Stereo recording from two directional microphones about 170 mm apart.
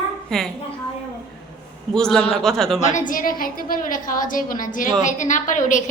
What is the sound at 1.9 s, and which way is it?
Speech, 5° left (ahead or behind).